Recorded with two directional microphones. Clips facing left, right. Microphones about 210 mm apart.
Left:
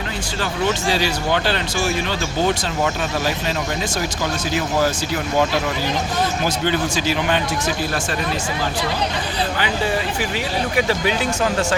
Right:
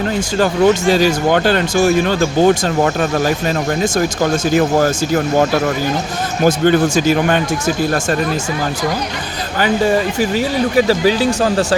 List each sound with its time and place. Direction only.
0.3 s speech: 45° right (ahead or behind)
9.6 s speech: 45° right (ahead or behind)